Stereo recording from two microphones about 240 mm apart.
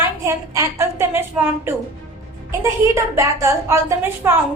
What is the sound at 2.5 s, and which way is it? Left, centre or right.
A woman's voice, centre.